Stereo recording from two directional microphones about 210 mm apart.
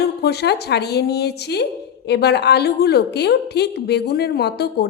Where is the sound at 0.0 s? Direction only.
50° left (ahead or behind).